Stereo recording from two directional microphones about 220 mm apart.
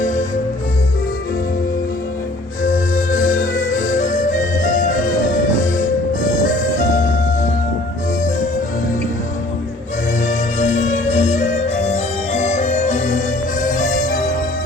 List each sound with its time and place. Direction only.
0.0 s music: 35° left (ahead or behind)
2.6 s music: 40° left (ahead or behind)
10.2 s music: 30° left (ahead or behind)